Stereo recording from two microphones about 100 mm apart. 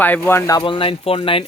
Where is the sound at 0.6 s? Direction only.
60° left (ahead or behind).